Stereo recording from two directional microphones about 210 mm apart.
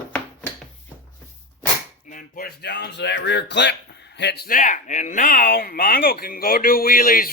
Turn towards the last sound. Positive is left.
turn(degrees=45)  # may be behind; listen again after turning